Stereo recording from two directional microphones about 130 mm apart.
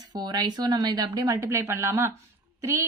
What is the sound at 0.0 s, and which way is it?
Speech, 30° right (ahead or behind).